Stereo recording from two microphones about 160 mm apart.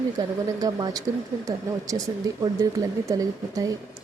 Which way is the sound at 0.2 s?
25° right (ahead or behind).